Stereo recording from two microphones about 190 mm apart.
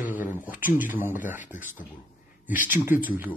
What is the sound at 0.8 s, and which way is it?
Speech, 10° right (ahead or behind).